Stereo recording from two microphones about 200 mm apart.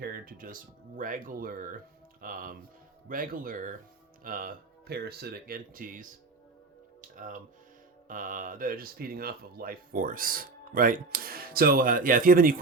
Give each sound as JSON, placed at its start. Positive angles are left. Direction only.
{"t": 0.0, "sound": "speech", "side_deg": -45}
{"t": 7.2, "sound": "speech", "side_deg": -40}